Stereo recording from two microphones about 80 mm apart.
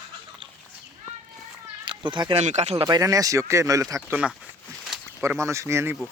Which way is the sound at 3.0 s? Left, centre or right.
Right.